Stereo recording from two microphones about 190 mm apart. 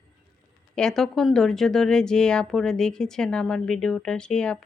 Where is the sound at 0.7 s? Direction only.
5° left (ahead or behind).